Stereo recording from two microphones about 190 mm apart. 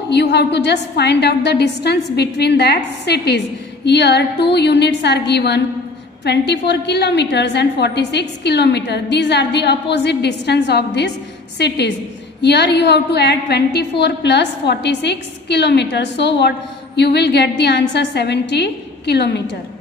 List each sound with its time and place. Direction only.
0.1 s a woman's voice: 65° left (ahead or behind)